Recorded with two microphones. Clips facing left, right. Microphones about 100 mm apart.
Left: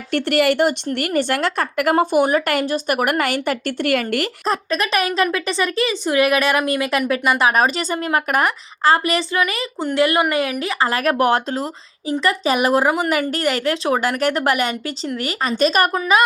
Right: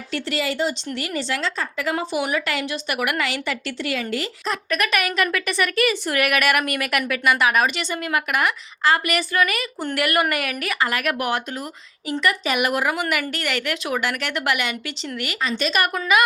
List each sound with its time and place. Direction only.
0.1 s a woman's voice: 60° left (ahead or behind)
4.4 s a woman's voice: 30° left (ahead or behind)